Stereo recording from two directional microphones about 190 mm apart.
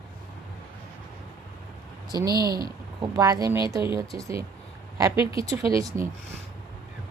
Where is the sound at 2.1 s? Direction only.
20° right (ahead or behind).